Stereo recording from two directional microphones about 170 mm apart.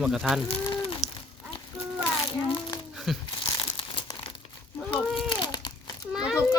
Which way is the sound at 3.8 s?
30° left (ahead or behind).